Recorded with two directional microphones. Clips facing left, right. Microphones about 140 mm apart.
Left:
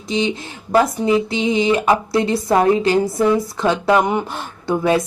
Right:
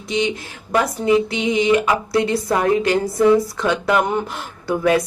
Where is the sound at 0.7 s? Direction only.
30° left (ahead or behind).